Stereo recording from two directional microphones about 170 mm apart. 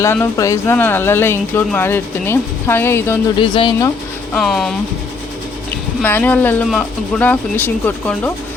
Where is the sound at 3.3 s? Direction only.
30° left (ahead or behind).